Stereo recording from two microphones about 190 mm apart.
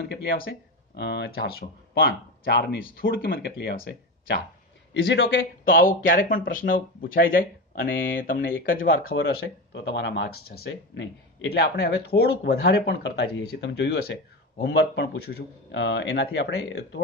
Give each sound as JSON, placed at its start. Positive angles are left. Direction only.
{"t": 0.1, "sound": "speech", "side_deg": 55}
{"t": 4.9, "sound": "speech", "side_deg": 80}
{"t": 5.7, "sound": "speech", "side_deg": 50}
{"t": 11.6, "sound": "a man's voice", "side_deg": 60}